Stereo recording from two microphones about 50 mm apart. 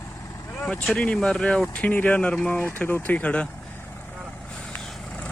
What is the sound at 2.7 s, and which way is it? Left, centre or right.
Speech, left.